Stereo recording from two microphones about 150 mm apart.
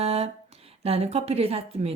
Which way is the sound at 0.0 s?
45° right (ahead or behind).